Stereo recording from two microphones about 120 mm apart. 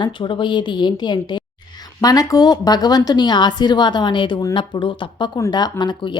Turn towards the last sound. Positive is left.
turn(degrees=40)  # may be behind; listen again after turning